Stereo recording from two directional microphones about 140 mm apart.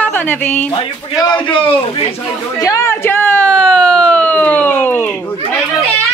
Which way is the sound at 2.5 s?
20° left (ahead or behind).